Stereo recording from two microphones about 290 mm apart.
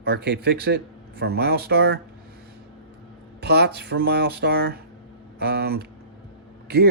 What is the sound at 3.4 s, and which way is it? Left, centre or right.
Speech, right.